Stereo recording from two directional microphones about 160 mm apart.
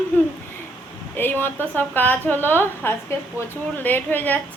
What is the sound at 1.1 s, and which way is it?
A woman's voice, 15° left (ahead or behind).